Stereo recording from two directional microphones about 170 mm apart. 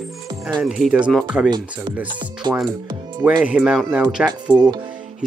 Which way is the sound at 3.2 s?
10° right (ahead or behind).